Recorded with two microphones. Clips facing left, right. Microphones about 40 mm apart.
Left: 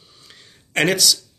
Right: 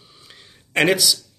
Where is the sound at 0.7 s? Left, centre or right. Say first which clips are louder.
Right 1 dB; centre.